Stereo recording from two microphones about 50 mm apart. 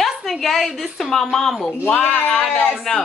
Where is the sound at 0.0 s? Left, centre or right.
Centre.